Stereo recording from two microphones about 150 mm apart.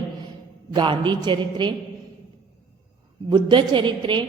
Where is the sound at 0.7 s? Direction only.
30° right (ahead or behind).